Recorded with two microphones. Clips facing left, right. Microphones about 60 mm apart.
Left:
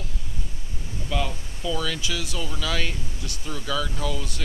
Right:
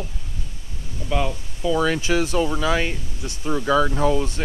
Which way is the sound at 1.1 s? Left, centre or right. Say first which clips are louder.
Right 5 dB; right.